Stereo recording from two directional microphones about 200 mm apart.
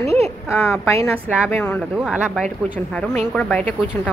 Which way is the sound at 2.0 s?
5° right (ahead or behind).